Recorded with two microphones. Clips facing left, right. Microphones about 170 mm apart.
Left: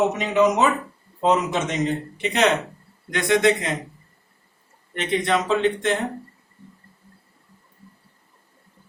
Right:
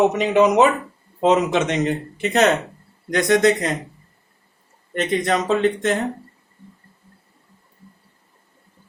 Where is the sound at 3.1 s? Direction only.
40° right (ahead or behind).